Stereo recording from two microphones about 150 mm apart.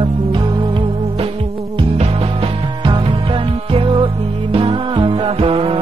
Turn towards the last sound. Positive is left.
turn(degrees=-35)  # may be behind; listen again after turning